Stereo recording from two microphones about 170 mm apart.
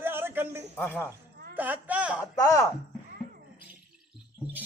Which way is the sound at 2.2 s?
20° left (ahead or behind).